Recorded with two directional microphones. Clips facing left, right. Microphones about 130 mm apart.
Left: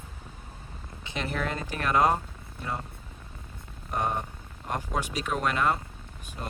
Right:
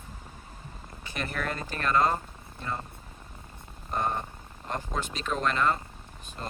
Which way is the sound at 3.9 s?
10° left (ahead or behind).